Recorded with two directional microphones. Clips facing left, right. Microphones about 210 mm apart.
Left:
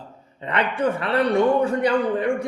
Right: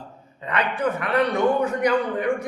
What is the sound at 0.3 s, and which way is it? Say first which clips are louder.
A man's voice: left 2 dB; 30° left (ahead or behind).